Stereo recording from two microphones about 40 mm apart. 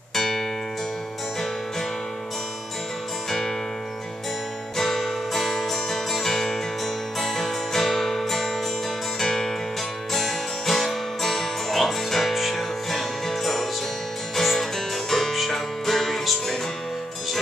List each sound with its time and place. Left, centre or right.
0.1 s music: centre
3.3 s music: centre
4.7 s music: centre